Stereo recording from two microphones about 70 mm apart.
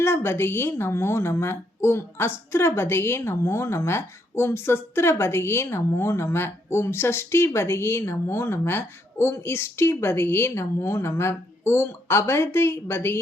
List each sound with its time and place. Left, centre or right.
0.0 s a woman's voice: left